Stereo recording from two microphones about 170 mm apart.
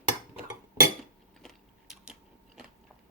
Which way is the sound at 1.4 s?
Centre (ahead or behind).